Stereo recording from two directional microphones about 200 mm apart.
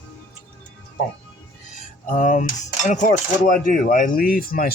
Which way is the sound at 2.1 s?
40° left (ahead or behind).